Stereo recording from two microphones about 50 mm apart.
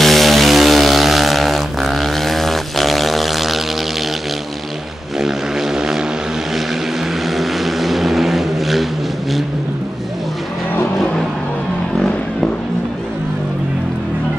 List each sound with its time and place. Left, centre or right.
0.0 s chainsaw: centre
5.2 s fixed-wing aircraft: centre
7.2 s vehicle: centre